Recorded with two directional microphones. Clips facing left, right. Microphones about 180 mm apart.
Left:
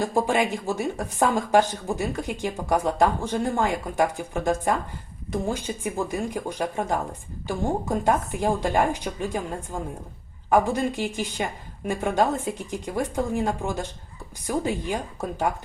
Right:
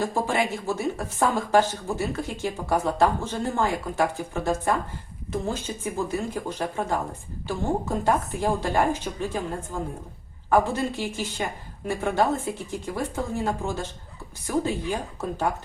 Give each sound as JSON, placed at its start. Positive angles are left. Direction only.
{"t": 0.1, "sound": "speech", "side_deg": 15}
{"t": 10.5, "sound": "speech", "side_deg": 15}